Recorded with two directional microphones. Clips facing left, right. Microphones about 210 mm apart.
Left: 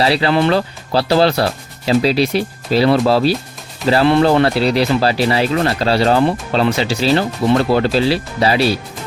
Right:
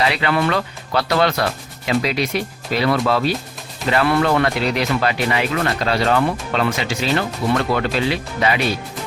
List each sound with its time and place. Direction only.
0.0 s speech: 30° left (ahead or behind)